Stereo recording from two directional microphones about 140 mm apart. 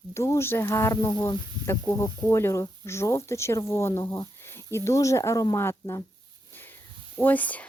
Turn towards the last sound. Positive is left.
turn(degrees=10)  # may be behind; listen again after turning